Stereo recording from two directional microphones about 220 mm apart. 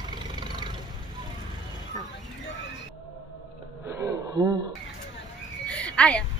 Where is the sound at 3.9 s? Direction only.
15° right (ahead or behind).